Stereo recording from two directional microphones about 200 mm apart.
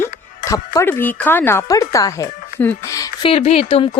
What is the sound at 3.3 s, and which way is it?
Speech, 30° left (ahead or behind).